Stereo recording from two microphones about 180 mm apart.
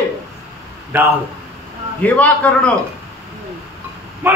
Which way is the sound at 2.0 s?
10° left (ahead or behind).